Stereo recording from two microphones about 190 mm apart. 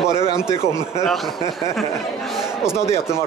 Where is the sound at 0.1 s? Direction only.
20° right (ahead or behind).